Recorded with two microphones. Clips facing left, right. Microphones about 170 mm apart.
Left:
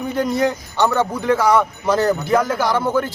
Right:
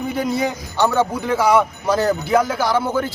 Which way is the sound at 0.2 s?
5° right (ahead or behind).